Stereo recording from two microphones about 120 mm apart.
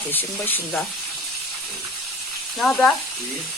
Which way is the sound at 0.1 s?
15° left (ahead or behind).